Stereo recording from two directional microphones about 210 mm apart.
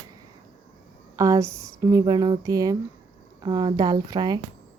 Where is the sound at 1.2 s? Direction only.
15° right (ahead or behind).